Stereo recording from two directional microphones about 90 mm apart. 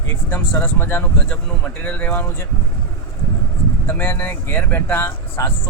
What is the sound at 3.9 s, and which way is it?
Speech, 20° left (ahead or behind).